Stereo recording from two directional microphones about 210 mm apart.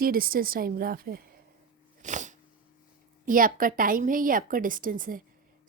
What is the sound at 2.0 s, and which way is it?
Sneeze, 35° right (ahead or behind).